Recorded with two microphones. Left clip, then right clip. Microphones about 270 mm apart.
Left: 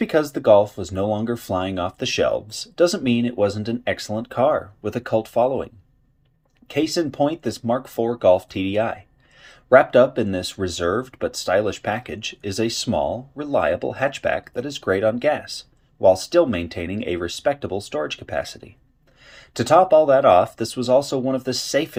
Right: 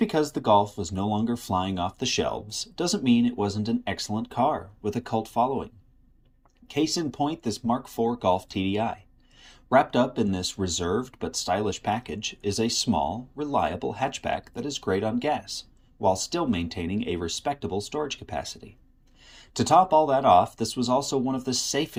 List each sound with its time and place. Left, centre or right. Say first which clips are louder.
0.0 s speech: left 6 dB; centre